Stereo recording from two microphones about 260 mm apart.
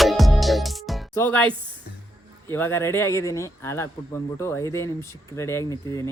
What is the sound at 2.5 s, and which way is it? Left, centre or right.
Speech, centre.